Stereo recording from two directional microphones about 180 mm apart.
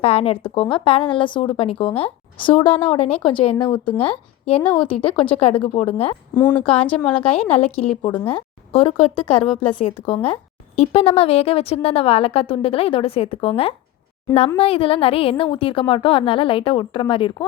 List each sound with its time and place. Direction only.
0.0 s a woman's voice: 35° left (ahead or behind)
6.9 s a woman's voice: 5° left (ahead or behind)
7.3 s a woman's voice: 35° left (ahead or behind)
9.4 s a woman's voice: 5° left (ahead or behind)
10.2 s a woman's voice: 35° left (ahead or behind)